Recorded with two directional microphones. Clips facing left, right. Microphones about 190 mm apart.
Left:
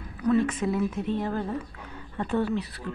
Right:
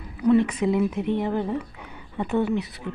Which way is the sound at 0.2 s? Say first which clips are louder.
Right 4 dB; 20° right (ahead or behind).